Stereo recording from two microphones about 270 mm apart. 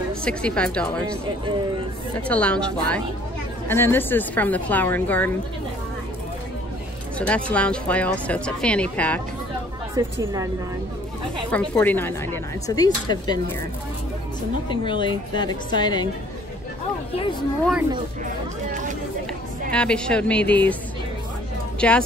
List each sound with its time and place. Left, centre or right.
0.2 s speech: centre
2.2 s speech: centre
7.2 s speech: centre
10.0 s a woman's voice: centre
11.5 s speech: centre
14.7 s speech: centre
18.7 s a sound: right
19.7 s speech: centre
21.7 s speech: centre